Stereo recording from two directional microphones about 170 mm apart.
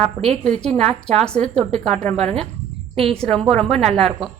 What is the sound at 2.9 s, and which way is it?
A woman's voice, 35° right (ahead or behind).